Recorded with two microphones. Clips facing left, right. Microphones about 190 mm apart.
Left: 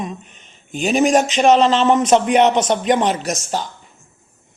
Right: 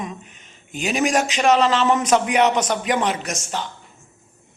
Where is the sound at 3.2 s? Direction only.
40° left (ahead or behind).